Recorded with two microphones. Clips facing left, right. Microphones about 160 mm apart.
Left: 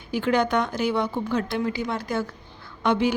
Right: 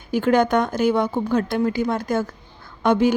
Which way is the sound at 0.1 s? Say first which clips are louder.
Right 5 dB; 45° right (ahead or behind).